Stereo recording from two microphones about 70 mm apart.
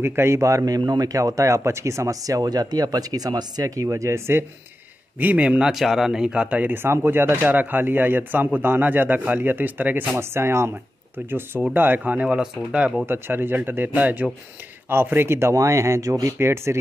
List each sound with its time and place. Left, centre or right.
0.0 s speech: right
5.2 s speech: right
5.6 s speech: centre; by 10.0 s right
10.1 s speech: right
12.1 s speech: centre
13.0 s speech: right